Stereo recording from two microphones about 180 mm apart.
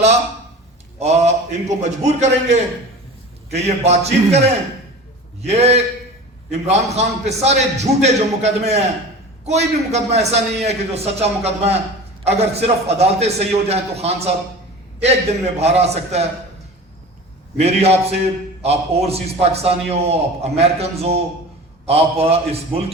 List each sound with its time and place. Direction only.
0.9 s a man's voice: 35° right (ahead or behind)
15.5 s a man's voice: 35° right (ahead or behind)
17.6 s a man's voice: 35° right (ahead or behind)